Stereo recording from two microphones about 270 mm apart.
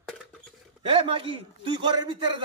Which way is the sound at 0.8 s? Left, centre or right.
Centre.